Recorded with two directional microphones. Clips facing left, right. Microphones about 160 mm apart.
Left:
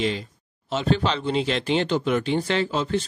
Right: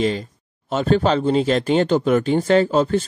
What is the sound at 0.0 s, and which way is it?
Speech, 45° right (ahead or behind).